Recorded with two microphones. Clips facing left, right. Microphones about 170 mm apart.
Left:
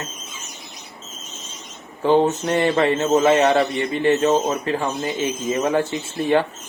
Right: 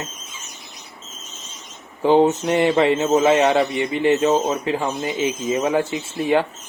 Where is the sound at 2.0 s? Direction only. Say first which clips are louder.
Right 2 dB; 15° right (ahead or behind).